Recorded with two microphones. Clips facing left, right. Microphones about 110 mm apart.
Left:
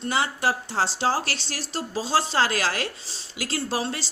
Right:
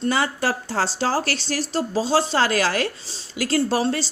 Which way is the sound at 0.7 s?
40° right (ahead or behind).